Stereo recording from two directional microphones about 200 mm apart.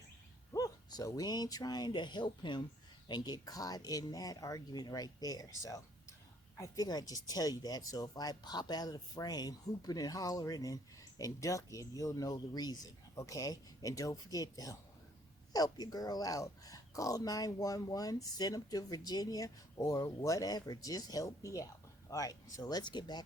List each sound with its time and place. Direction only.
0.5 s speech: 20° left (ahead or behind)